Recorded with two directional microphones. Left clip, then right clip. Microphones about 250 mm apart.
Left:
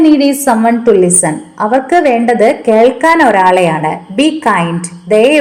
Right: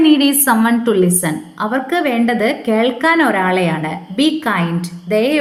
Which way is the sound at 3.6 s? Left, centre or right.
Left.